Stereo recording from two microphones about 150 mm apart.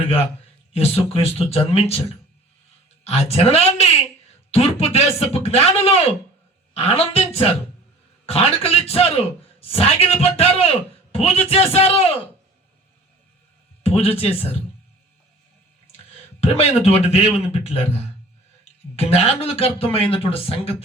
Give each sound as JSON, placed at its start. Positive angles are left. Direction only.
{"t": 0.7, "sound": "a man's voice", "side_deg": 40}
{"t": 3.0, "sound": "a woman's voice", "side_deg": 45}
{"t": 13.8, "sound": "a man's voice", "side_deg": 40}
{"t": 16.4, "sound": "a man's voice", "side_deg": 45}